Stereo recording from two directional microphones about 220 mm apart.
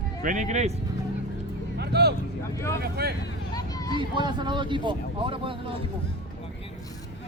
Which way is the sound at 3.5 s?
15° left (ahead or behind).